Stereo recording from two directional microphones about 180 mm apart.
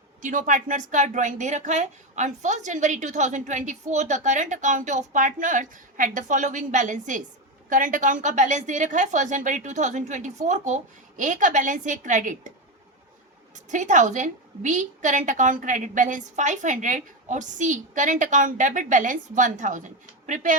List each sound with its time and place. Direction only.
0.2 s a woman's voice: 45° right (ahead or behind)
13.7 s a woman's voice: 45° right (ahead or behind)